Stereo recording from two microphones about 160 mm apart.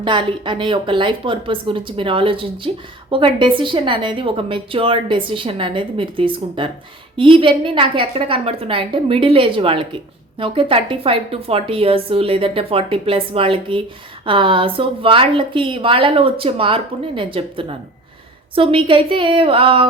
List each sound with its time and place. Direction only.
0.0 s a woman's voice: 30° right (ahead or behind)